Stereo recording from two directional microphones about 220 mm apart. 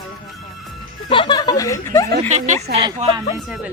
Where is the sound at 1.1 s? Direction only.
20° left (ahead or behind).